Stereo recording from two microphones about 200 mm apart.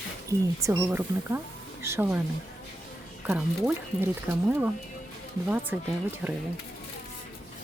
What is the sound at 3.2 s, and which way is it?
Speech, 10° right (ahead or behind).